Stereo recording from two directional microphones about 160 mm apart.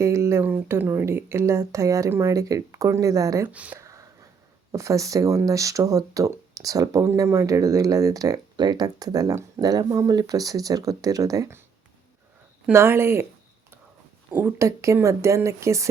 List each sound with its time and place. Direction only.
0.0 s speech: 20° right (ahead or behind)
12.6 s speech: 15° right (ahead or behind)
14.3 s speech: 15° right (ahead or behind)